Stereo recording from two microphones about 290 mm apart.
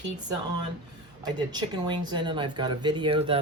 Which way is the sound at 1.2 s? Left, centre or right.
Centre.